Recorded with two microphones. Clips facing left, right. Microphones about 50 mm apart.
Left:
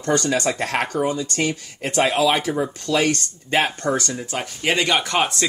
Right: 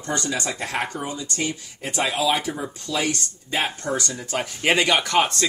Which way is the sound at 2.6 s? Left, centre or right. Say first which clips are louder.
Left 6 dB; left.